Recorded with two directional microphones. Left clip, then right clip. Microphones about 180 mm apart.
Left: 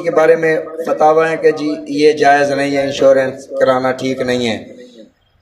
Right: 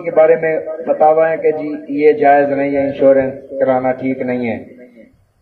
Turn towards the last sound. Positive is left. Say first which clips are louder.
# left 2 dB
turn(degrees=45)  # may be behind; listen again after turning